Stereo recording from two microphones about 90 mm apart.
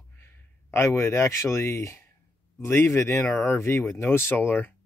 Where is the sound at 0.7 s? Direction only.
30° left (ahead or behind).